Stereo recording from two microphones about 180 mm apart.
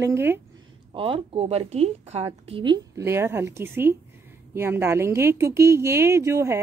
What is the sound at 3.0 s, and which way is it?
A woman's voice, 15° right (ahead or behind).